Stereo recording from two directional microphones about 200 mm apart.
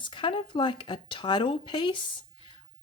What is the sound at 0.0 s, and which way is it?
Speech, 25° left (ahead or behind).